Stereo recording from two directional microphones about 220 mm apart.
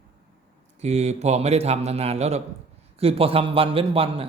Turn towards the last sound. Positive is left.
turn(degrees=-25)  # may be behind; listen again after turning